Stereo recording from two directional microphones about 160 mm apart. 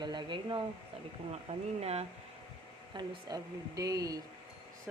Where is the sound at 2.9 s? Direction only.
25° right (ahead or behind).